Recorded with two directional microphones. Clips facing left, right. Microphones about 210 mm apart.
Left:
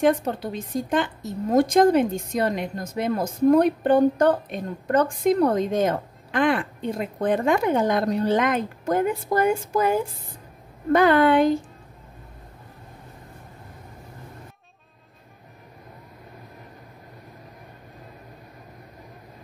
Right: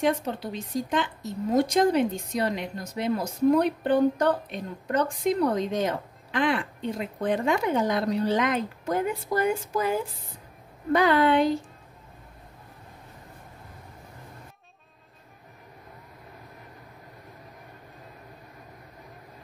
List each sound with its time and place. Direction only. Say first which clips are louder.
0.0 s a woman's voice: left 5 dB; 50° left (ahead or behind)